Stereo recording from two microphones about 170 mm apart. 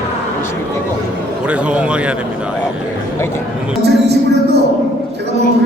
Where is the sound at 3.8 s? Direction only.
75° right (ahead or behind).